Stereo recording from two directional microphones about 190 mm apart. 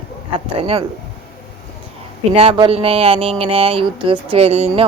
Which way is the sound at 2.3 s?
30° right (ahead or behind).